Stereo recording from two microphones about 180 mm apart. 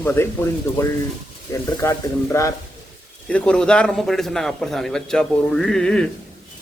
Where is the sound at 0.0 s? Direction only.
10° left (ahead or behind).